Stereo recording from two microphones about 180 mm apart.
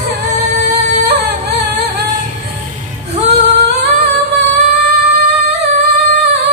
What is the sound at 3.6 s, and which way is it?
Music, 70° right (ahead or behind).